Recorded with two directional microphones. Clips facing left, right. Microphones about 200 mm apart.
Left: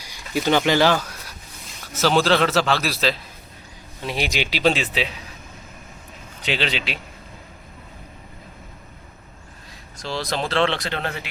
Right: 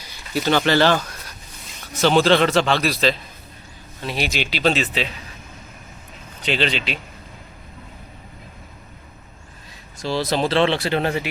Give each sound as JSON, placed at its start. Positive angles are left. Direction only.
{"t": 0.0, "sound": "speech", "side_deg": 15}
{"t": 4.0, "sound": "speech", "side_deg": 15}
{"t": 6.4, "sound": "speech", "side_deg": 10}
{"t": 10.0, "sound": "speech", "side_deg": -5}